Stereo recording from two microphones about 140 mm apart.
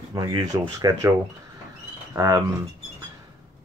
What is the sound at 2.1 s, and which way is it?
Speech, 25° right (ahead or behind).